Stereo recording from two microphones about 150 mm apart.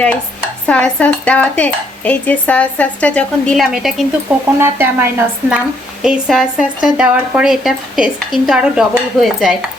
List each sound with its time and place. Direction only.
0.7 s a woman's voice: 5° left (ahead or behind); by 5.5 s 15° right (ahead or behind)
6.0 s speech: 5° right (ahead or behind)